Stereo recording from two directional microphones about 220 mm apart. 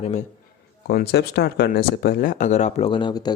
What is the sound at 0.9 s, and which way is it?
Speech, 45° left (ahead or behind).